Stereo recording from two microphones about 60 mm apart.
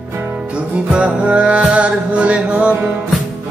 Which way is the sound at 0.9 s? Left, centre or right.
Centre.